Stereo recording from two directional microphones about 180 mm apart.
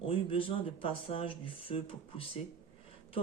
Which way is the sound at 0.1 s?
30° left (ahead or behind).